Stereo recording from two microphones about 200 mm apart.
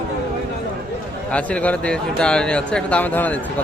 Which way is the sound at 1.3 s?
5° left (ahead or behind).